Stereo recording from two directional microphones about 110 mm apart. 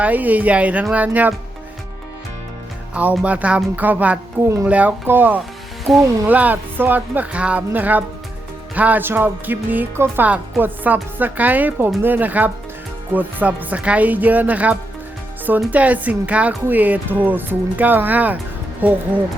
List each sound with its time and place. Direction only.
0.0 s speech: 15° right (ahead or behind)
2.9 s speech: 15° right (ahead or behind)
5.9 s speech: centre (ahead or behind)
6.2 s speech: 15° right (ahead or behind)